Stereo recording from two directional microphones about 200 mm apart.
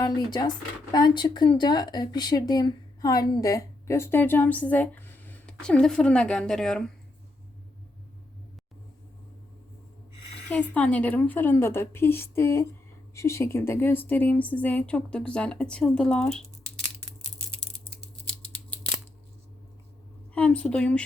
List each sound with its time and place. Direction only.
0.3 s speech: 20° left (ahead or behind); by 6.9 s 5° left (ahead or behind)
10.5 s speech: 5° left (ahead or behind)
20.3 s a woman's voice: 5° left (ahead or behind)